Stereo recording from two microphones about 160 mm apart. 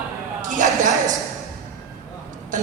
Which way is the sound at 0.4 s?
55° right (ahead or behind).